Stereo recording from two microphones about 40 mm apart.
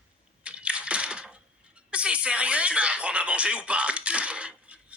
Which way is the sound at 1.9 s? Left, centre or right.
Right.